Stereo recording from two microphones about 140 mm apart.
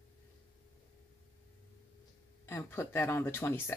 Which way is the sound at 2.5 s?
15° left (ahead or behind).